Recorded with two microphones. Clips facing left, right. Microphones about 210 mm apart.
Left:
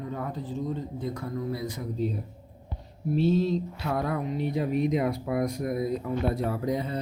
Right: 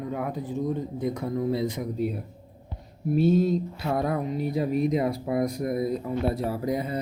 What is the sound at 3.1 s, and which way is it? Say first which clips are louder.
Speech: right 3 dB; 50° right (ahead or behind).